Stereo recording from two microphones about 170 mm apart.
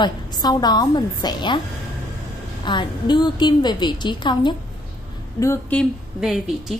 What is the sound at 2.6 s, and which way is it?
A woman's voice, 25° left (ahead or behind).